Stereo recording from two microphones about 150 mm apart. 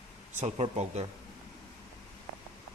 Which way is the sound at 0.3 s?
50° right (ahead or behind).